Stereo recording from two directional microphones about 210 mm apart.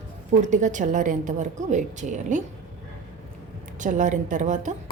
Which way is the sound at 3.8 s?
35° right (ahead or behind).